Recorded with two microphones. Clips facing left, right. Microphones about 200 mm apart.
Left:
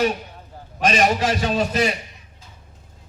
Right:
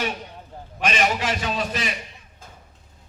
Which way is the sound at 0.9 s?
40° left (ahead or behind).